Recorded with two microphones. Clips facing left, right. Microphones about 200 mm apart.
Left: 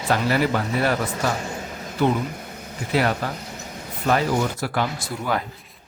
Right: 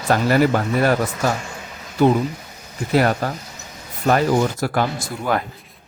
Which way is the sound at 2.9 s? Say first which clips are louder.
Right 4 dB; 45° right (ahead or behind).